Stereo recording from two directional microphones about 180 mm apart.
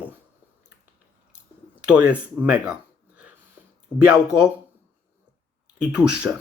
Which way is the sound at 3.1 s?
10° right (ahead or behind).